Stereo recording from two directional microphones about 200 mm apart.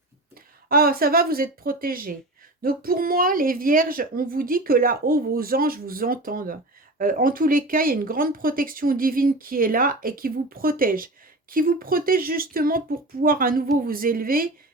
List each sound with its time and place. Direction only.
0.7 s speech: 45° right (ahead or behind)